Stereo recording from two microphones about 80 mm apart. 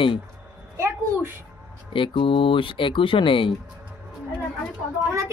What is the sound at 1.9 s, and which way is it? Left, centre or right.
Speech, left.